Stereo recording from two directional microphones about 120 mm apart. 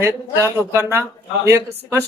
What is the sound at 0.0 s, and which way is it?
Speech, 20° right (ahead or behind).